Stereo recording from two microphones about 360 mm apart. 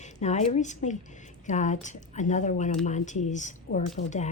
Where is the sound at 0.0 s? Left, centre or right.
Centre.